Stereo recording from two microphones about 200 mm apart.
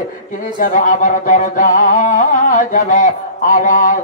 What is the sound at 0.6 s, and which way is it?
Mantra, 40° left (ahead or behind).